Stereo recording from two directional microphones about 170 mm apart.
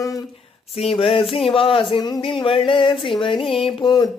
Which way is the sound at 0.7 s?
35° left (ahead or behind).